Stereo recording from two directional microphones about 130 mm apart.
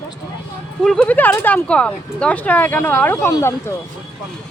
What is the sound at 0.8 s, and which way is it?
Speech, 5° left (ahead or behind).